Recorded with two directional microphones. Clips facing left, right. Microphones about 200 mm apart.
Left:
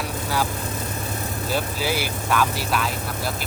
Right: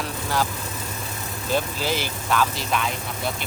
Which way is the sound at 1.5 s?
10° left (ahead or behind).